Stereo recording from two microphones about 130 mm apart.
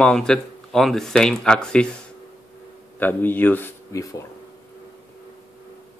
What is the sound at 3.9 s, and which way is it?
Speech, 25° left (ahead or behind).